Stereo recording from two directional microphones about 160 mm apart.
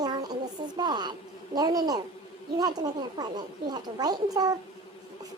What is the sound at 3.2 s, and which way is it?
Speech, 25° right (ahead or behind).